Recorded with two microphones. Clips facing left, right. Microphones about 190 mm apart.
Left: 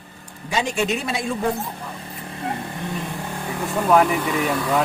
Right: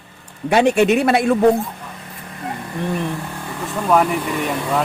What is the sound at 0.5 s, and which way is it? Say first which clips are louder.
Speech: right 9 dB; 60° right (ahead or behind).